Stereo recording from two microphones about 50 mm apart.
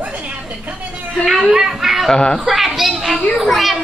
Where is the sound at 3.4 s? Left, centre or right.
Centre.